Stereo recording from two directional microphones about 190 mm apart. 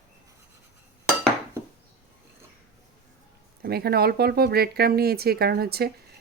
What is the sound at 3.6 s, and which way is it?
Speech, 55° right (ahead or behind).